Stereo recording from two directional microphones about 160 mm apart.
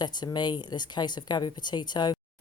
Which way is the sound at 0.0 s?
25° left (ahead or behind).